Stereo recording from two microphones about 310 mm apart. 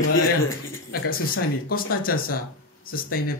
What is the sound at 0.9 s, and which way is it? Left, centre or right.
Speech, left.